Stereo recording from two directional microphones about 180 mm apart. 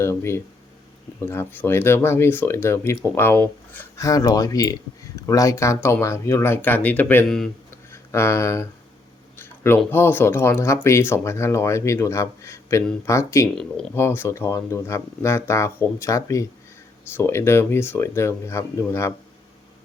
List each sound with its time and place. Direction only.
0.0 s speech: 15° left (ahead or behind)
7.7 s a sound: 15° left (ahead or behind)
9.4 s speech: 10° left (ahead or behind)